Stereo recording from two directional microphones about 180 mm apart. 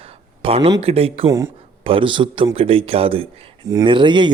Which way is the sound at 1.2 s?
15° right (ahead or behind).